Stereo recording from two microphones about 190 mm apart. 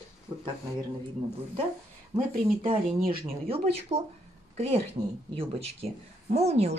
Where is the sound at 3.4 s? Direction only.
30° right (ahead or behind).